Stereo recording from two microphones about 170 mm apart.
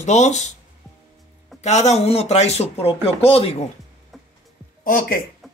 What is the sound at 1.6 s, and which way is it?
Speech, 40° left (ahead or behind).